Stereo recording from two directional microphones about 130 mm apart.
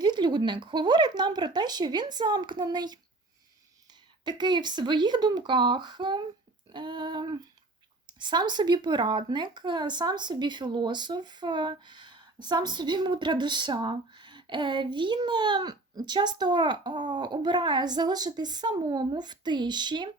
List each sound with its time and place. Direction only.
0.0 s speech: 35° right (ahead or behind)
4.2 s speech: 35° right (ahead or behind)